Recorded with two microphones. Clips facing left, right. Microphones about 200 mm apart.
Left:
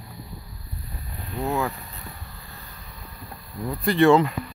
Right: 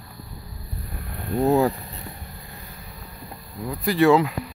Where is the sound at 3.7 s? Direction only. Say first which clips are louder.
Even; 5° right (ahead or behind).